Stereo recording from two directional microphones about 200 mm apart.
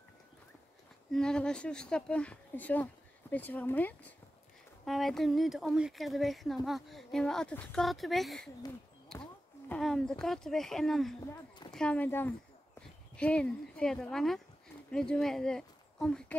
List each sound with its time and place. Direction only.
1.1 s speech: 5° left (ahead or behind)
11.1 s speech: 20° left (ahead or behind)
11.7 s speech: 5° left (ahead or behind)